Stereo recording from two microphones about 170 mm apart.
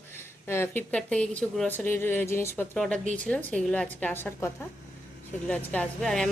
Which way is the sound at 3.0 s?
45° right (ahead or behind).